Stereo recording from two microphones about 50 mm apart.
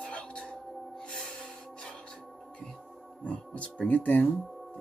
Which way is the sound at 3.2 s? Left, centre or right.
Left.